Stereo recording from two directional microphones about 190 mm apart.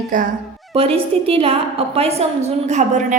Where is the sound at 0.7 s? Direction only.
30° right (ahead or behind).